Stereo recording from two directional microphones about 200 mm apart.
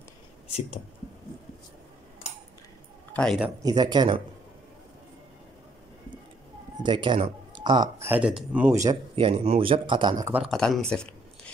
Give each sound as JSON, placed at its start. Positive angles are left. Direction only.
{"t": 3.1, "sound": "speech", "side_deg": 5}
{"t": 3.6, "sound": "speech", "side_deg": -20}
{"t": 6.8, "sound": "speech", "side_deg": -25}
{"t": 8.1, "sound": "speech", "side_deg": -5}
{"t": 9.1, "sound": "speech", "side_deg": -30}
{"t": 10.4, "sound": "speech", "side_deg": 0}